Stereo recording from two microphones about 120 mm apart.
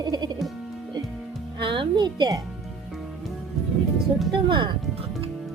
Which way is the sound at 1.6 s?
45° right (ahead or behind).